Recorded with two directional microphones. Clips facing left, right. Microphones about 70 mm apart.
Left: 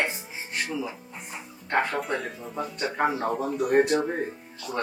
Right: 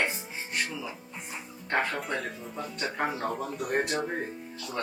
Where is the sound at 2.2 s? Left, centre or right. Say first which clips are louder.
Left 2 dB; centre.